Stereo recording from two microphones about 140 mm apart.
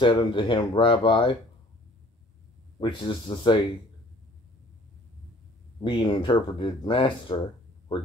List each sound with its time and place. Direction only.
0.0 s speech: 35° left (ahead or behind)
2.8 s speech: 35° left (ahead or behind)
5.8 s speech: 35° left (ahead or behind)